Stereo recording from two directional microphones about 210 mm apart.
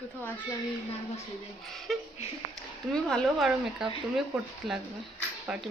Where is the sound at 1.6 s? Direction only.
Centre (ahead or behind).